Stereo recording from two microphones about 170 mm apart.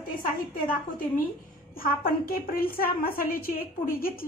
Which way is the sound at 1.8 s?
60° left (ahead or behind).